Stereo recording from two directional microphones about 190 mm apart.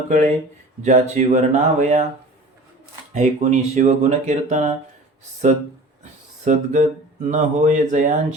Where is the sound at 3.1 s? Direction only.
40° right (ahead or behind).